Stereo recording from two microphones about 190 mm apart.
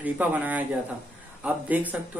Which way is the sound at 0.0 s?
10° right (ahead or behind).